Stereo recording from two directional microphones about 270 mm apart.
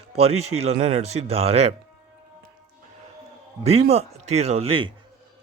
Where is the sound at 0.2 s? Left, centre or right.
Right.